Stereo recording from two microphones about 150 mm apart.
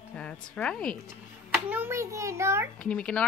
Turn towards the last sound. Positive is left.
turn(degrees=10)  # may be behind; listen again after turning